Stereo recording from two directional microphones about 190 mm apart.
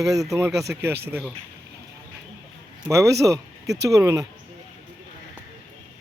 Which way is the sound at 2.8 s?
15° right (ahead or behind).